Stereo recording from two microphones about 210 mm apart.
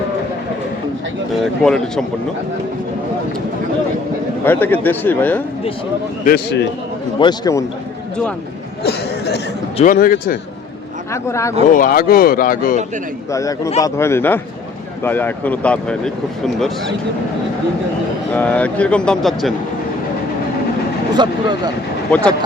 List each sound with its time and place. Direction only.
1.6 s speech: 5° left (ahead or behind)
4.4 s speech: 10° left (ahead or behind)
6.2 s a man's voice: 50° left (ahead or behind)
7.2 s speech: 20° left (ahead or behind)
8.8 s speech: 50° left (ahead or behind)
9.7 s speech: 40° left (ahead or behind)
11.1 s speech: 15° left (ahead or behind)
11.7 s speech: 40° left (ahead or behind)
13.3 s speech: 15° left (ahead or behind)
18.3 s speech: 5° left (ahead or behind)
21.1 s speech: 20° right (ahead or behind)